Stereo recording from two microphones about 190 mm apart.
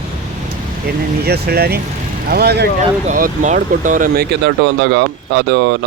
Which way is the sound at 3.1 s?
45° right (ahead or behind).